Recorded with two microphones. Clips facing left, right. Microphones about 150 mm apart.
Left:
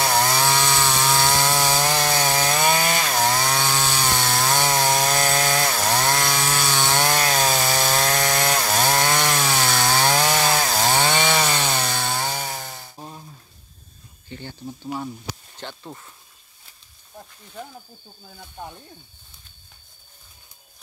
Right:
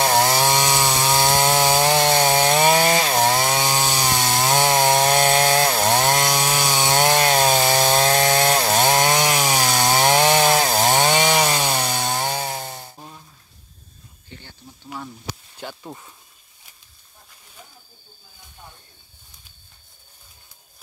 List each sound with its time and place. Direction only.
0.0 s chainsaw: 30° right (ahead or behind)
0.4 s chainsaw: 20° right (ahead or behind)
3.8 s wood: 20° right (ahead or behind)
15.6 s a sound: 10° right (ahead or behind)